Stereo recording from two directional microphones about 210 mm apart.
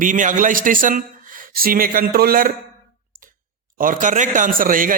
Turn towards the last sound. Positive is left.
turn(degrees=-40)  # may be behind; listen again after turning